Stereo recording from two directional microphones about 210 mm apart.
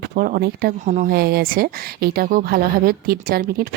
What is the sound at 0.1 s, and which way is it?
Speech, 40° right (ahead or behind).